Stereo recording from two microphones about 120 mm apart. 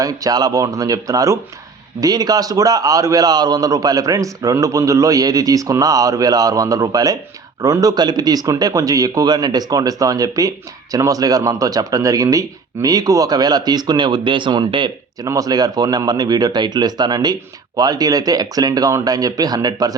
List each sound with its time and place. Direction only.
0.0 s a man's voice: 30° right (ahead or behind)